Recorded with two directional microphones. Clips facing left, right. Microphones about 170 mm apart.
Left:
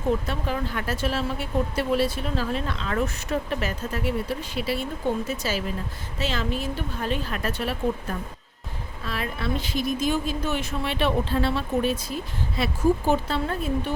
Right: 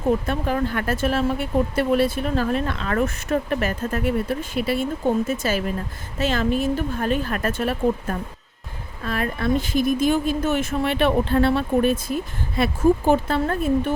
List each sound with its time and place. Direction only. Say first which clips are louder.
0.3 s speech: right 5 dB; 55° right (ahead or behind)